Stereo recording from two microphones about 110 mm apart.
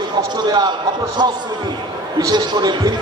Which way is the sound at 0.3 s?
40° right (ahead or behind).